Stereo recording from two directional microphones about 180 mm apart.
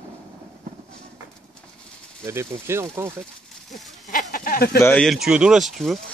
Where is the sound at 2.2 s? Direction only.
15° right (ahead or behind).